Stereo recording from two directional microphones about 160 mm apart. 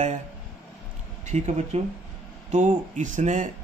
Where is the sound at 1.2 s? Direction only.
45° right (ahead or behind).